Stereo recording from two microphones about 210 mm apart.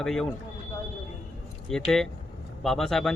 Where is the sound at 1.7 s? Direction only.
Centre (ahead or behind).